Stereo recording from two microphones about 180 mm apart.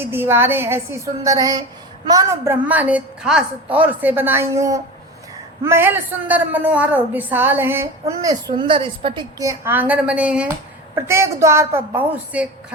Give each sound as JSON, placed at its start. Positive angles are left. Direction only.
{"t": 0.0, "sound": "a woman's voice", "side_deg": -10}